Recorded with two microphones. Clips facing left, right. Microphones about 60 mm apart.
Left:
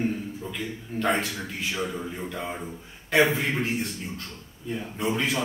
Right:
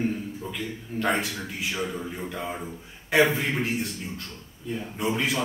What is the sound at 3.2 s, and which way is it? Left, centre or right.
Speech, centre.